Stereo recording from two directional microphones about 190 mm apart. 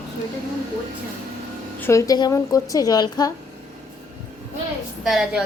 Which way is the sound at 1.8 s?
15° left (ahead or behind).